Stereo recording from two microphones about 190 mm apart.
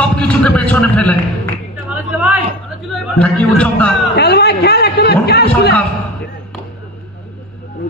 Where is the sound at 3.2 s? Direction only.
5° left (ahead or behind).